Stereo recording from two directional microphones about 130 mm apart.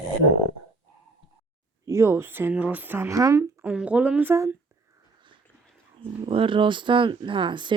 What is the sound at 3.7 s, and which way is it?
Speech, 10° right (ahead or behind).